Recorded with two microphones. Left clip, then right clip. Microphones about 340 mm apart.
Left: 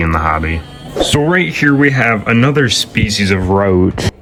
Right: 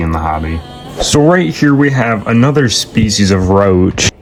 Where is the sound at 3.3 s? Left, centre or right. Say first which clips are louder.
Right 3 dB; left.